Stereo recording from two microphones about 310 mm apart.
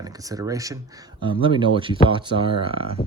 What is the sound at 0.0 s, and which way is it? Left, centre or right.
Speech, centre.